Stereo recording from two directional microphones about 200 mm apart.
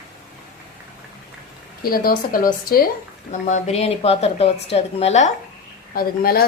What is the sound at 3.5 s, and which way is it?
A woman's voice, 35° left (ahead or behind).